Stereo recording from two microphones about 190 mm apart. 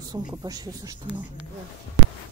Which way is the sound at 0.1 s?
20° right (ahead or behind).